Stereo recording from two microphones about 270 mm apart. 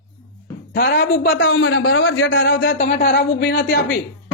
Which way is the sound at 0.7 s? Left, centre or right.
Left.